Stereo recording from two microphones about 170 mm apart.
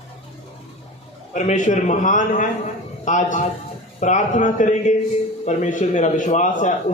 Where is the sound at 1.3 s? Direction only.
45° left (ahead or behind).